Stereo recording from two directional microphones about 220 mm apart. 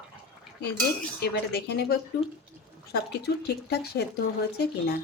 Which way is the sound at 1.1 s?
50° left (ahead or behind).